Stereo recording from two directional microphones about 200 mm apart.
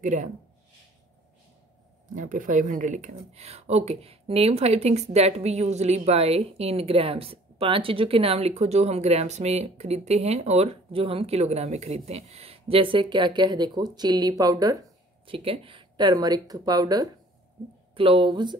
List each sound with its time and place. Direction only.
0.0 s speech: 40° right (ahead or behind)
2.1 s speech: 40° right (ahead or behind); by 18.6 s 20° right (ahead or behind)